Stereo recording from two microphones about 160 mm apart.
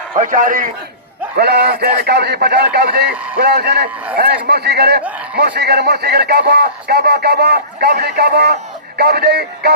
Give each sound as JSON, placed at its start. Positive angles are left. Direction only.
{"t": 0.2, "sound": "a man's voice", "side_deg": -55}
{"t": 1.4, "sound": "a man's voice", "side_deg": -90}